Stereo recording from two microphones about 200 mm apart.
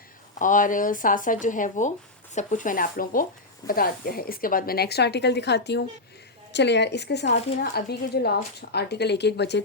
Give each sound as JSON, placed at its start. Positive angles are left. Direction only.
{"t": 0.3, "sound": "a woman's voice", "side_deg": 40}